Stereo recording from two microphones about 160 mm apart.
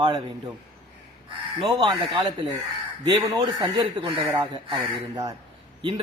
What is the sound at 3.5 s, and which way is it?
Speech, 25° right (ahead or behind).